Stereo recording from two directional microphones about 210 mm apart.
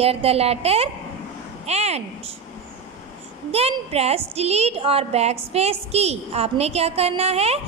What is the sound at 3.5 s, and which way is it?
A woman's voice, 30° right (ahead or behind).